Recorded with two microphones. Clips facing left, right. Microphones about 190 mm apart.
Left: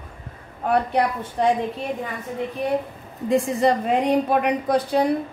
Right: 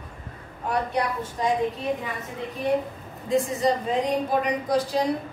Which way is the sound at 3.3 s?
65° left (ahead or behind).